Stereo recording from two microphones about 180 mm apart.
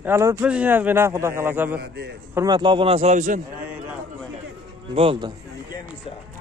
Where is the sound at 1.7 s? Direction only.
65° right (ahead or behind).